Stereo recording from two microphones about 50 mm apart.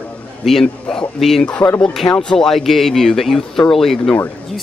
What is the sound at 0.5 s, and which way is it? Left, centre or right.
Speech, centre.